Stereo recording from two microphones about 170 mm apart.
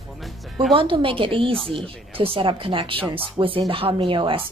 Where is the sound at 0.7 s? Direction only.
30° right (ahead or behind).